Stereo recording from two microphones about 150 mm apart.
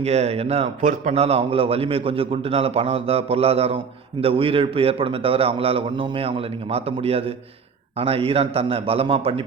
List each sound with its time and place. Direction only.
0.0 s a man's voice: 45° right (ahead or behind)